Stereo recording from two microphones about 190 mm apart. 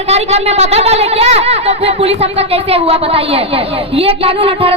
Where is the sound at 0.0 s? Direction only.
35° right (ahead or behind).